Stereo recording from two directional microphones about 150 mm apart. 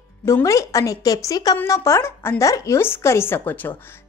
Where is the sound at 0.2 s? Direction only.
20° left (ahead or behind).